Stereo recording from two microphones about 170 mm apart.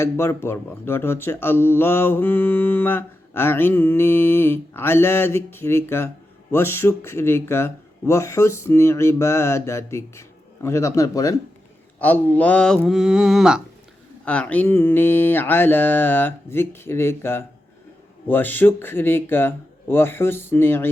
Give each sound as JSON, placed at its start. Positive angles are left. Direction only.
{"t": 0.0, "sound": "speech", "side_deg": 15}
{"t": 11.9, "sound": "mantra", "side_deg": 10}
{"t": 14.3, "sound": "speech", "side_deg": 10}